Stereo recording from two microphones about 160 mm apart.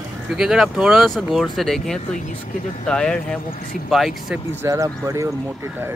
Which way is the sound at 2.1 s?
50° left (ahead or behind).